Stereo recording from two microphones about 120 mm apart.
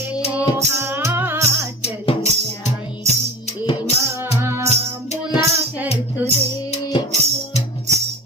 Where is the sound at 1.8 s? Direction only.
60° left (ahead or behind).